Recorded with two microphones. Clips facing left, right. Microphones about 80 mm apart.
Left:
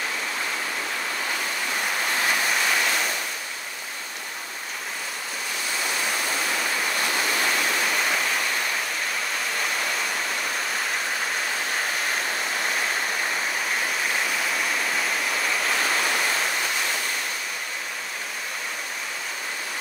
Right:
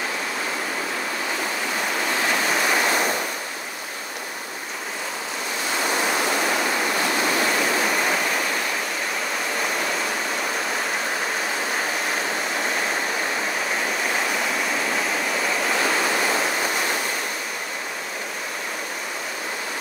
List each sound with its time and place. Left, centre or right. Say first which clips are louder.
2.7 s waves: right 4 dB; right
5.9 s waterfall: right 6 dB; right
16.3 s waterfall: right 3 dB; centre